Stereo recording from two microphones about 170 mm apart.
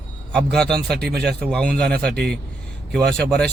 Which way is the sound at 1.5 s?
5° left (ahead or behind).